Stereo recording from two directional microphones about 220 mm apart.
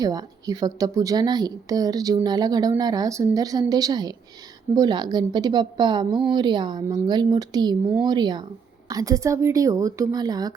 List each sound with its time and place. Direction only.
0.0 s a woman's voice: 15° right (ahead or behind)